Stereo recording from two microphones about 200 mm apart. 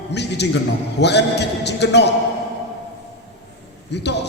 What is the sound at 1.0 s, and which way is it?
A man's voice, 55° left (ahead or behind).